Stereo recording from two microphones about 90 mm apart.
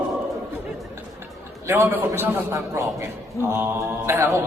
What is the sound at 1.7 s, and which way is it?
Speech, 25° right (ahead or behind).